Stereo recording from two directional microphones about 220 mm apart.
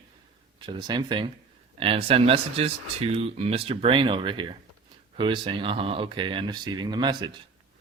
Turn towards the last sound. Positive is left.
turn(degrees=-20)  # may be behind; listen again after turning